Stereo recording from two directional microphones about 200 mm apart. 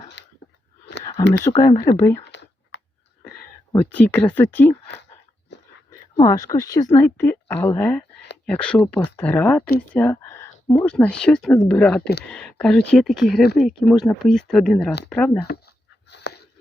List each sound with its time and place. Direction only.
0.2 s a sound: 60° left (ahead or behind)
1.5 s speech: 20° left (ahead or behind)
2.3 s clicking: 60° left (ahead or behind)
3.7 s speech: 10° left (ahead or behind)
6.1 s speech: 15° left (ahead or behind)
15.4 s a sound: 55° left (ahead or behind)